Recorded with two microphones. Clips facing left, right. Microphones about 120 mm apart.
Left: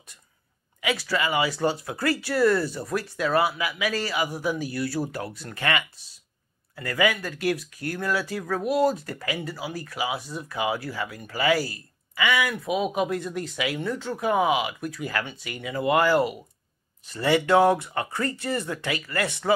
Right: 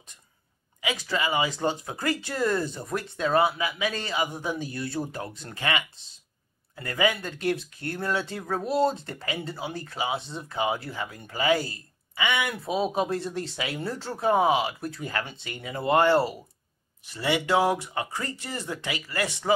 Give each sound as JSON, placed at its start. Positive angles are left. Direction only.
{"t": 0.7, "sound": "speech", "side_deg": -20}
{"t": 17.1, "sound": "speech", "side_deg": -20}